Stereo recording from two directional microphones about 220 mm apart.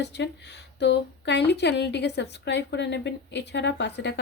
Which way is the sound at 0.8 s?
50° left (ahead or behind).